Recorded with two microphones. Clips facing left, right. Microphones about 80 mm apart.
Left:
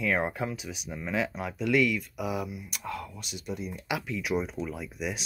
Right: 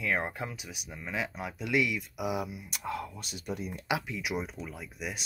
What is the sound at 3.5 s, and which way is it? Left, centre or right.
Speech, right.